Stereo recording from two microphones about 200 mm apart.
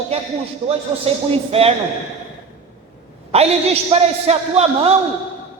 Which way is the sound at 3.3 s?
30° right (ahead or behind).